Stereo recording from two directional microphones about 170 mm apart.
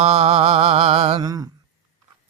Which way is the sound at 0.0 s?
40° right (ahead or behind).